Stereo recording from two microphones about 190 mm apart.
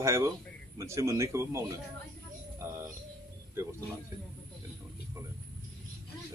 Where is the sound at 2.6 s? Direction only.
15° right (ahead or behind).